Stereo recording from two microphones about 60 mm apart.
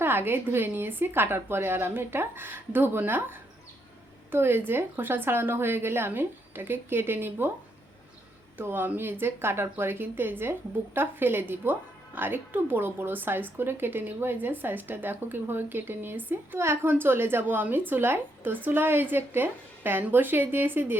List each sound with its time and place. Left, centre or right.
0.0 s speech: right
8.5 s speech: right